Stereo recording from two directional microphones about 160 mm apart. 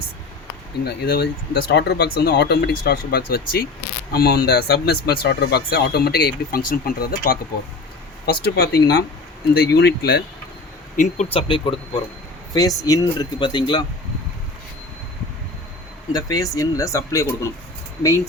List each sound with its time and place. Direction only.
0.9 s speech: 85° left
6.7 s speech: 60° left (ahead or behind)
8.3 s speech: 80° left
10.9 s speech: 50° left (ahead or behind)
11.3 s speech: 30° left (ahead or behind)
16.1 s speech: 25° left (ahead or behind)